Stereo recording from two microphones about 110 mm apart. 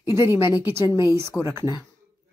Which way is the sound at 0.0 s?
25° right (ahead or behind).